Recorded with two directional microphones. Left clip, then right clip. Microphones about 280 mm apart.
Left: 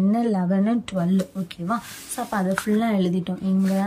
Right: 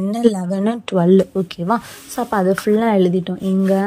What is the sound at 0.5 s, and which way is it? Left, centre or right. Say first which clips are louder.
A woman's voice: right 4 dB; right.